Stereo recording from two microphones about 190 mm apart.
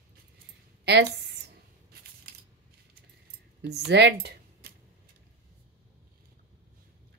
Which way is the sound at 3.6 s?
65° right (ahead or behind).